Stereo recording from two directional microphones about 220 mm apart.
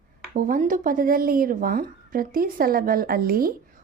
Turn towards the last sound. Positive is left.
turn(degrees=-40)  # may be behind; listen again after turning